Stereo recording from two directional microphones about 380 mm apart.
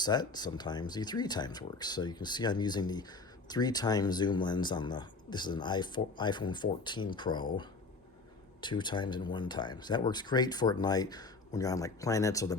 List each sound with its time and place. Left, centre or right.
0.0 s speech: centre